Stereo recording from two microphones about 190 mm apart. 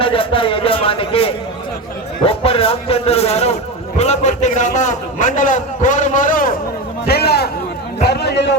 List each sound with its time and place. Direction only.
0.0 s a man's voice: 30° left (ahead or behind); by 6.5 s 45° left (ahead or behind)
7.1 s a sound: 55° left (ahead or behind)
8.0 s a man's voice: 60° left (ahead or behind)